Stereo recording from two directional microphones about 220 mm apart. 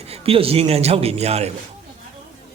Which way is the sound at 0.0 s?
25° right (ahead or behind).